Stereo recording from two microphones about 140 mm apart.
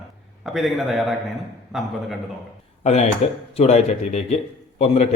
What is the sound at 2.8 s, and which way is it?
A man's voice, 50° left (ahead or behind).